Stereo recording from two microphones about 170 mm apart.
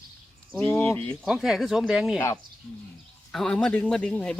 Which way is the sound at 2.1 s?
15° left (ahead or behind).